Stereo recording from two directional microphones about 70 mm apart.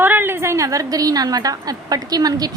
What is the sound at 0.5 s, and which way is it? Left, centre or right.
A woman's voice, right.